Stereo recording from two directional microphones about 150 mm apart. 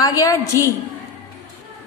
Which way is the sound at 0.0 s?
20° left (ahead or behind).